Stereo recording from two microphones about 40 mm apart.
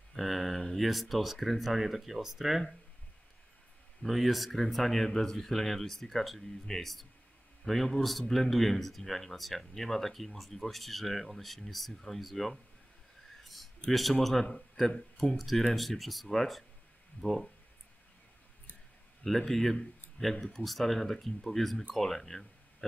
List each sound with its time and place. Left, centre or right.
0.1 s a sound: centre
0.7 s speech: centre
4.0 s speech: centre
13.4 s a sound: centre
14.4 s speech: centre
19.2 s speech: centre